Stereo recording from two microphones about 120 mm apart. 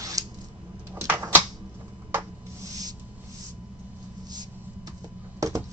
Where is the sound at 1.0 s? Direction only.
15° right (ahead or behind).